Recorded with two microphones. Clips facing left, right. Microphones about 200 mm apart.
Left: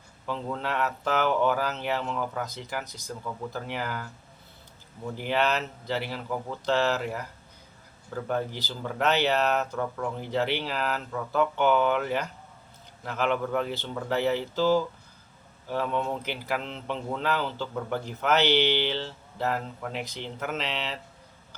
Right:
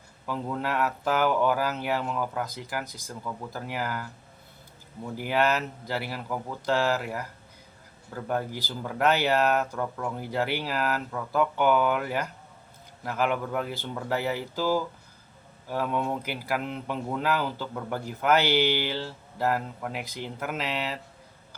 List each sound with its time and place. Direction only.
0.3 s speech: 10° right (ahead or behind)
5.1 s speech: 10° right (ahead or behind)
8.3 s speech: 10° right (ahead or behind)